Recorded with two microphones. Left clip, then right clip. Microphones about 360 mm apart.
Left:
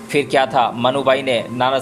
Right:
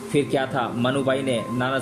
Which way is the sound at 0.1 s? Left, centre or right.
Centre.